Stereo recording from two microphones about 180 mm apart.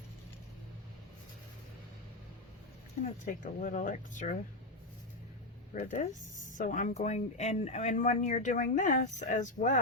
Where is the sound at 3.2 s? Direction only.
50° left (ahead or behind).